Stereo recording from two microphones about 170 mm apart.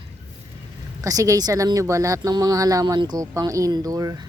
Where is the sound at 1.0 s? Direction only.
20° right (ahead or behind).